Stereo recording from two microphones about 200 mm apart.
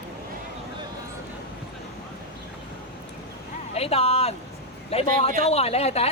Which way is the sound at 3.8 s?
30° left (ahead or behind).